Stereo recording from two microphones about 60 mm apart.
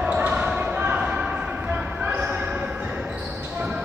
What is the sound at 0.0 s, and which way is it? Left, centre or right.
Basketball bounce, right.